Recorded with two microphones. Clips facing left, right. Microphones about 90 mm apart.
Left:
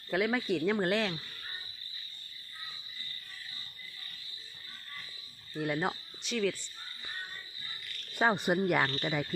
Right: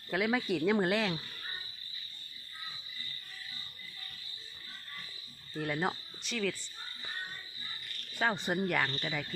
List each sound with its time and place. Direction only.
0.1 s speech: centre (ahead or behind)
5.5 s speech: 5° left (ahead or behind)
8.1 s speech: 20° left (ahead or behind)